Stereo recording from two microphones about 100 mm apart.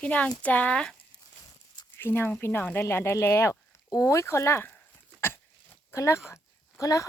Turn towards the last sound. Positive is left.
turn(degrees=35)  # may be behind; listen again after turning